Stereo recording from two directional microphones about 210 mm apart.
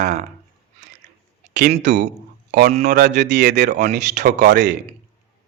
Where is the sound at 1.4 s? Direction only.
30° right (ahead or behind).